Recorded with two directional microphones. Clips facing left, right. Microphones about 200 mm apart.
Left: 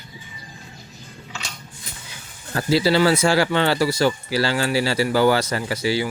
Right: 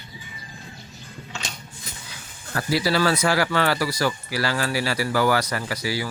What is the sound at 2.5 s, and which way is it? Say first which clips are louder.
Speech: left 4 dB; 25° left (ahead or behind).